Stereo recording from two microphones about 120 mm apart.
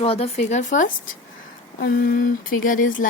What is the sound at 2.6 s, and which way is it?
Speech, 90° left.